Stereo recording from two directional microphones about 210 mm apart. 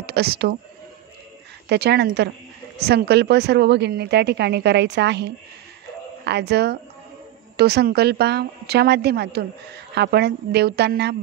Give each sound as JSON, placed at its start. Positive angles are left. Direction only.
{"t": 0.0, "sound": "speech", "side_deg": -50}
{"t": 1.7, "sound": "a woman's voice", "side_deg": -50}